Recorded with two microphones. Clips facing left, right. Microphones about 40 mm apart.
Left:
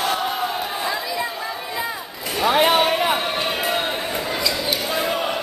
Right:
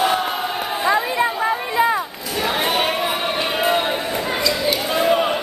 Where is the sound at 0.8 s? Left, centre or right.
Right.